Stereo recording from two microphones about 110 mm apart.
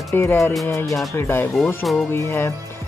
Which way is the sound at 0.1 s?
20° left (ahead or behind).